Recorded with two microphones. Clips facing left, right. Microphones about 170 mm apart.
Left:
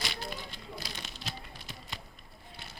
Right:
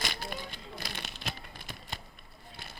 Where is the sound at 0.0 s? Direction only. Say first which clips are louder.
Right 1 dB; 50° right (ahead or behind).